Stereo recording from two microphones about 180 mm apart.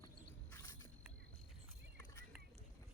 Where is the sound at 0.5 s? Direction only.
20° left (ahead or behind).